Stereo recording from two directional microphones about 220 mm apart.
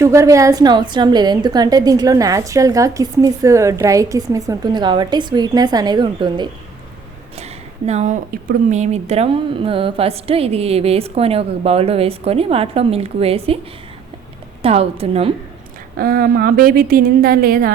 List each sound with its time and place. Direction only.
0.0 s a woman's voice: 15° right (ahead or behind)
14.6 s speech: 25° right (ahead or behind)
16.0 s a woman's voice: 45° right (ahead or behind)